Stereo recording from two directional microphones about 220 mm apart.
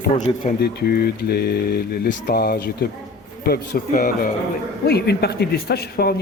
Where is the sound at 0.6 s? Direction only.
45° left (ahead or behind).